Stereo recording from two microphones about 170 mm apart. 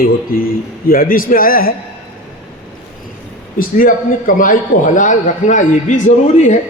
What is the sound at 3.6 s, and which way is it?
A man's voice, 55° left (ahead or behind).